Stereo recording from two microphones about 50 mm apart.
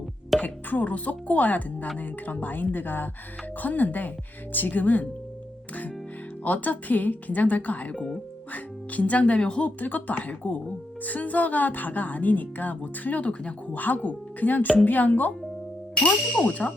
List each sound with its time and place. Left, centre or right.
0.4 s speech: left
6.4 s speech: left
9.6 s speech: left
16.0 s ding: left